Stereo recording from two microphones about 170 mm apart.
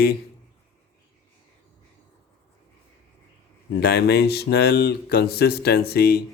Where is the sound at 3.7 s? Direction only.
70° left (ahead or behind).